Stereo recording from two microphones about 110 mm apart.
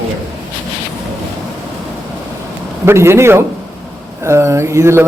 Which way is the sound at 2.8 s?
25° right (ahead or behind).